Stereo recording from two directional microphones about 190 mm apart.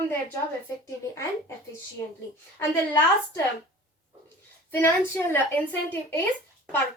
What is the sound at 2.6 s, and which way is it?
Speech, 15° left (ahead or behind).